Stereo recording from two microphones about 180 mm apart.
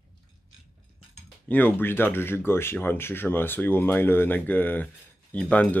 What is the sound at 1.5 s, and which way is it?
Speech, 10° left (ahead or behind).